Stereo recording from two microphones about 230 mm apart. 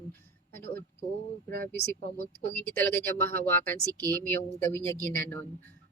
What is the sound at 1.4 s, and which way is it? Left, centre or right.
Speech, right.